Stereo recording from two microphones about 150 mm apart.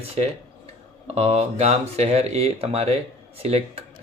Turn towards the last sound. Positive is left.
turn(degrees=-40)  # may be behind; listen again after turning